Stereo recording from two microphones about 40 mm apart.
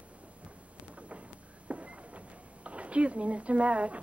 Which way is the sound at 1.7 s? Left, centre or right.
Right.